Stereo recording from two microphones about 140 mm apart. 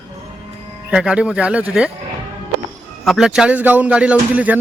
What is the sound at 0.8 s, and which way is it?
Speech, 5° right (ahead or behind).